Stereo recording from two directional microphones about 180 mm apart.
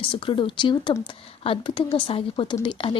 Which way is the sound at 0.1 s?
30° left (ahead or behind).